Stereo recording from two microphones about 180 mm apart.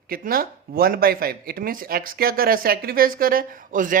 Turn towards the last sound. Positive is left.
turn(degrees=-50)  # may be behind; listen again after turning